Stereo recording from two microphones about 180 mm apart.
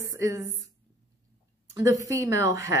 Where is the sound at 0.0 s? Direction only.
15° right (ahead or behind).